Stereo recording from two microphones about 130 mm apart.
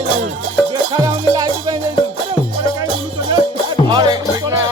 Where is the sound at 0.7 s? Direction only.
35° right (ahead or behind).